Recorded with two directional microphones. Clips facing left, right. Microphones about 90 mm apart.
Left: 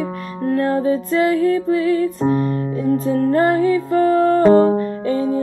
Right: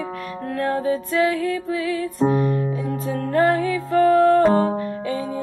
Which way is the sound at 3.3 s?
35° left (ahead or behind).